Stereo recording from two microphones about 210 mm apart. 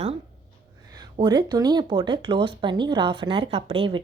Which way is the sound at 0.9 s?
20° right (ahead or behind).